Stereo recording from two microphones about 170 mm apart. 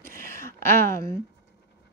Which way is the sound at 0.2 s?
15° left (ahead or behind).